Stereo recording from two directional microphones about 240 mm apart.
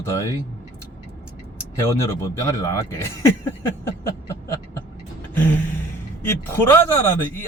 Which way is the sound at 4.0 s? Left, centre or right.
Centre.